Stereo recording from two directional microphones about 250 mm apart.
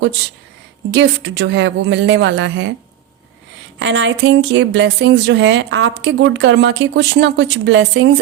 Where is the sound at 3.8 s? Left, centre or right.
Right.